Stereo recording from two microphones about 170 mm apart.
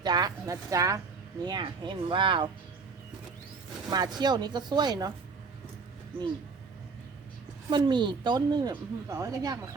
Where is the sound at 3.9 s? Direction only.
25° right (ahead or behind).